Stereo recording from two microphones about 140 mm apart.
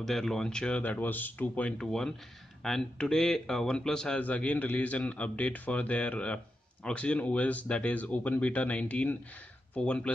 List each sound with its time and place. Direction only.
0.0 s speech: 5° left (ahead or behind)